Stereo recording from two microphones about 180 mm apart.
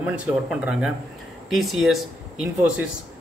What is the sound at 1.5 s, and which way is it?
Speech, centre (ahead or behind).